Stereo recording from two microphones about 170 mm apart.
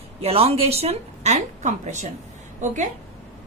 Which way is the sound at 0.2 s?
35° right (ahead or behind).